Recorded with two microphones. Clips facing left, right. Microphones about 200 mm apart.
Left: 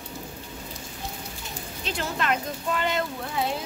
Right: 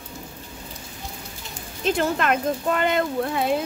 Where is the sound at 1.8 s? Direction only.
50° right (ahead or behind).